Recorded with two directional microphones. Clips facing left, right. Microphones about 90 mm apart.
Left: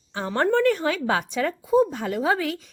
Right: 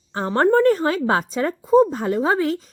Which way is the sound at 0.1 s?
40° right (ahead or behind).